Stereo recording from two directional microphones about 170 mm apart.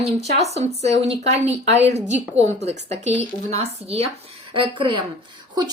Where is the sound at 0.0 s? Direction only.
40° right (ahead or behind).